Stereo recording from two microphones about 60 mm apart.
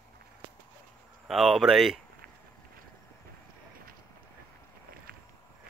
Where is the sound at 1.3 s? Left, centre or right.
Centre.